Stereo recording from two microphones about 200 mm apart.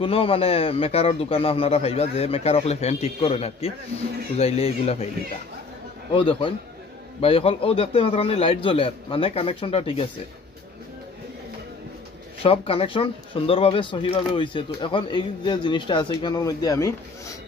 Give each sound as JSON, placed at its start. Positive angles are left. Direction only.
{"t": 0.0, "sound": "speech", "side_deg": 30}
{"t": 6.1, "sound": "speech", "side_deg": 25}
{"t": 12.4, "sound": "speech", "side_deg": 25}